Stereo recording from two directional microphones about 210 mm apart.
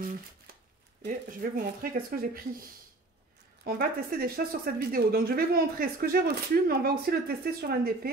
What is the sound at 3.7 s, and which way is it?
Speech, 45° right (ahead or behind).